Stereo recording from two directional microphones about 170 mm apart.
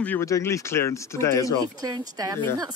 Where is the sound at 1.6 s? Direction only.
20° right (ahead or behind).